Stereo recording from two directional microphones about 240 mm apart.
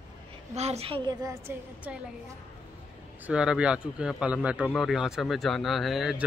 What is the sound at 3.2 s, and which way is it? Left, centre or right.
A man's voice, centre.